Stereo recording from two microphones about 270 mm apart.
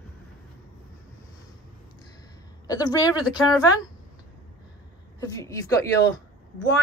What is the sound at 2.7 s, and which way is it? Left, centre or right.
A woman's voice, centre.